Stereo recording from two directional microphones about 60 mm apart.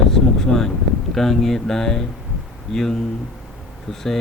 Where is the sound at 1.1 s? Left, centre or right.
Centre.